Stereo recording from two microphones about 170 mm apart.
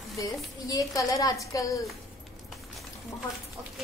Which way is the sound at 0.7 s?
20° left (ahead or behind).